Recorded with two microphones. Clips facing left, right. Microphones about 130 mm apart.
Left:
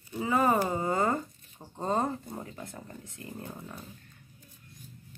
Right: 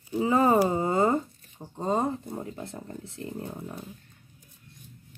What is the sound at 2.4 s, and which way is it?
Speech, 25° right (ahead or behind).